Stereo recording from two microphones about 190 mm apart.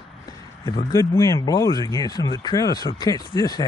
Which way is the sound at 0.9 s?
20° left (ahead or behind).